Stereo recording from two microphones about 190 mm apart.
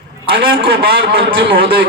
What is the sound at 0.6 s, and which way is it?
Speech, 55° right (ahead or behind).